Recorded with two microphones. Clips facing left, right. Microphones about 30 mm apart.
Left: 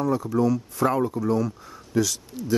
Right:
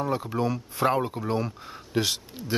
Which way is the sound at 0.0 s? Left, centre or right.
Right.